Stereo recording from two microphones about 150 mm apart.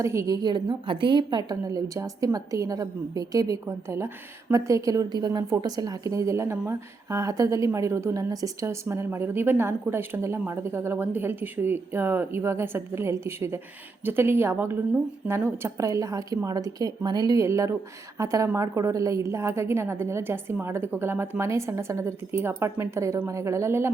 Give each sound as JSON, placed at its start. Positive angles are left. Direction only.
{"t": 0.0, "sound": "a woman's voice", "side_deg": -20}